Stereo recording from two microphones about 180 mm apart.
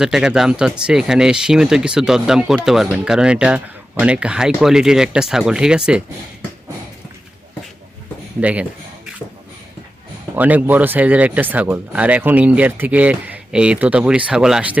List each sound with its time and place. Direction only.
0.0 s speech: 5° right (ahead or behind)
8.4 s speech: 10° right (ahead or behind)
10.3 s speech: 10° right (ahead or behind)